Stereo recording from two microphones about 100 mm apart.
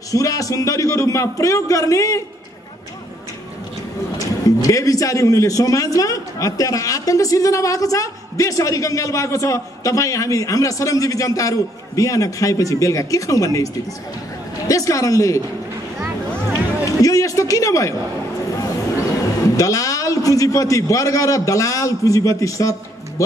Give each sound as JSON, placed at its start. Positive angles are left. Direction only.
{"t": 0.1, "sound": "a man's voice", "side_deg": 35}
{"t": 4.2, "sound": "a man's voice", "side_deg": 35}
{"t": 14.7, "sound": "a man's voice", "side_deg": 35}
{"t": 17.0, "sound": "a sound", "side_deg": 35}
{"t": 19.5, "sound": "a man's voice", "side_deg": 35}